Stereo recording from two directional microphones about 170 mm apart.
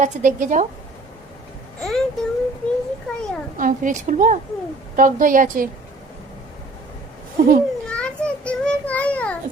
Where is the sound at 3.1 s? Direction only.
5° left (ahead or behind).